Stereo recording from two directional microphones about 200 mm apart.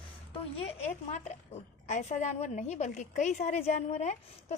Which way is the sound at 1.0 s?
35° left (ahead or behind).